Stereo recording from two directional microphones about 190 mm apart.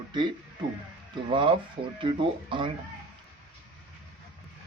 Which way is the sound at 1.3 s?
25° right (ahead or behind).